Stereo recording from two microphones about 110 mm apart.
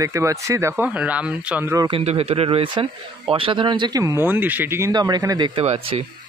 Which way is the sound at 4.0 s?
25° right (ahead or behind).